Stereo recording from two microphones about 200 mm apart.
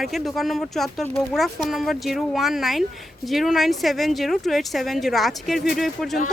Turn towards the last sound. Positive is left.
turn(degrees=0)  # may be behind; listen again after turning